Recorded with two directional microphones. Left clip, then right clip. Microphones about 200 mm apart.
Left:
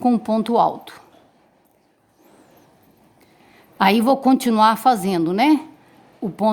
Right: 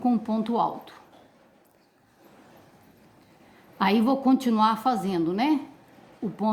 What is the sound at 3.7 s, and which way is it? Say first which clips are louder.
A woman's voice: left 7 dB; 55° left (ahead or behind).